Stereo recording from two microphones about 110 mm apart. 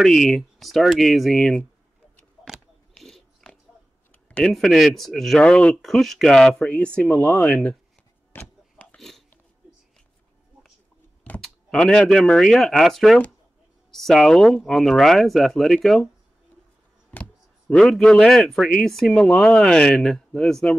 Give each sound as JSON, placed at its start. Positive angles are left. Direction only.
{"t": 0.0, "sound": "speech", "side_deg": 0}
{"t": 3.0, "sound": "biting", "side_deg": 5}
{"t": 4.1, "sound": "speech", "side_deg": 10}
{"t": 8.3, "sound": "a sound", "side_deg": 15}
{"t": 8.9, "sound": "a sound", "side_deg": 5}
{"t": 11.4, "sound": "speech", "side_deg": 5}
{"t": 17.1, "sound": "speech", "side_deg": 10}